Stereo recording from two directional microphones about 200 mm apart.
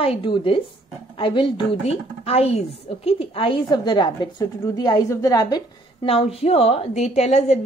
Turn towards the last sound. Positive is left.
turn(degrees=35)  # may be behind; listen again after turning